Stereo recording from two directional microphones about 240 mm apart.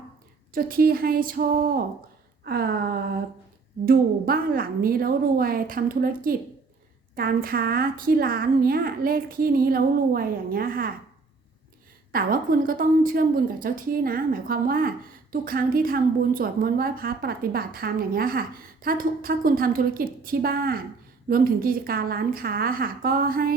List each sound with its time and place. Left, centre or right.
0.5 s a woman's voice: right
12.1 s a woman's voice: right